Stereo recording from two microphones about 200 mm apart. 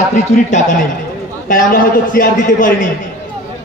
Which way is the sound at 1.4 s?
45° left (ahead or behind).